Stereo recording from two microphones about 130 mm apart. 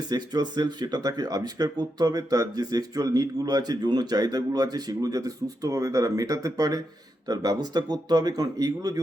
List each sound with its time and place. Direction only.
0.1 s speech: 30° right (ahead or behind)